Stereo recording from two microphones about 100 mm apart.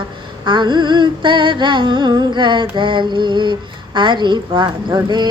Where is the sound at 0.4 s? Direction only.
50° right (ahead or behind).